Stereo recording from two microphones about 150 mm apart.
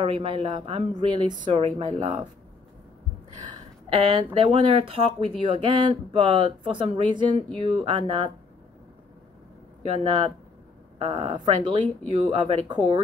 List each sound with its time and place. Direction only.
0.0 s speech: 40° right (ahead or behind)
3.4 s speech: 40° right (ahead or behind)
11.0 s speech: 40° right (ahead or behind)